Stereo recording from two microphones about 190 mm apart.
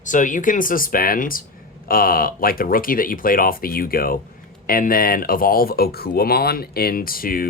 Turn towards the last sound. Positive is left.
turn(degrees=50)  # may be behind; listen again after turning